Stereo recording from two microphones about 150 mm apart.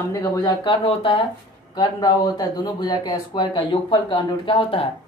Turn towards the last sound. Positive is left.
turn(degrees=35)  # may be behind; listen again after turning